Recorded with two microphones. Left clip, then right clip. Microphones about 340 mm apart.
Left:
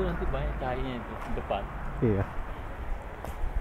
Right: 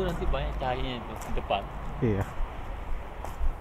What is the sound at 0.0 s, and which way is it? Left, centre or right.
Speech, right.